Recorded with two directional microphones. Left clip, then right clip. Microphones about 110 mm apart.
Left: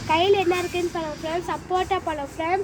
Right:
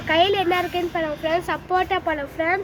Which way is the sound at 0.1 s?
35° right (ahead or behind).